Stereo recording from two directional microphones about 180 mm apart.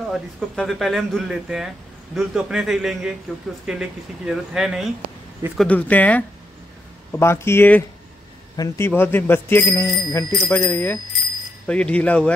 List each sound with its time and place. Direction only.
0.1 s speech: centre (ahead or behind)
5.6 s speech: 10° left (ahead or behind)